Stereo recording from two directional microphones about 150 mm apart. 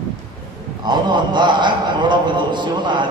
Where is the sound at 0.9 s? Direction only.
30° right (ahead or behind).